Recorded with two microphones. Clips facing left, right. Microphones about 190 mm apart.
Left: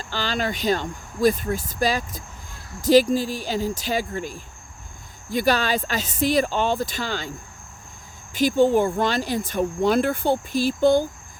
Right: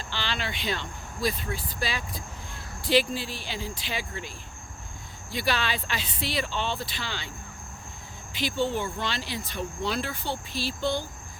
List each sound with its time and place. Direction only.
0.0 s speech: 45° left (ahead or behind)